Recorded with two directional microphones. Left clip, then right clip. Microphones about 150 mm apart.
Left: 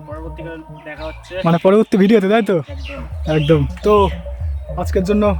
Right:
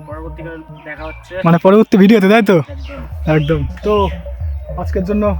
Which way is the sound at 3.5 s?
45° left (ahead or behind).